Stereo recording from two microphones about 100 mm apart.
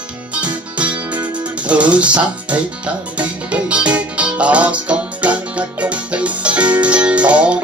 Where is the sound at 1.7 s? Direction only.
10° right (ahead or behind).